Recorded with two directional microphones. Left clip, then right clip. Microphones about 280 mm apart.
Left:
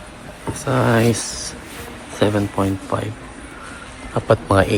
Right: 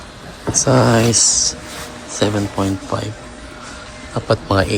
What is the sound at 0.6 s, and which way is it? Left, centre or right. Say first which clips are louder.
Speech: right 2 dB; centre.